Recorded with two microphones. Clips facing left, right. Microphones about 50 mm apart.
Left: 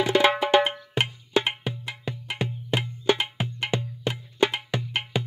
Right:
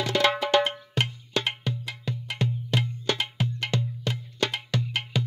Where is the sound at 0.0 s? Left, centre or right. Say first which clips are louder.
Left 3 dB; centre.